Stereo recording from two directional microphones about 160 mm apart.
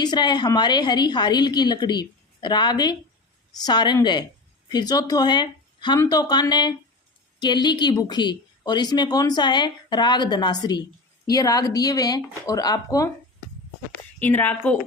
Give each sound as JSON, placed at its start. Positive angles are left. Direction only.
{"t": 0.0, "sound": "speech", "side_deg": 25}
{"t": 14.2, "sound": "a woman's voice", "side_deg": 10}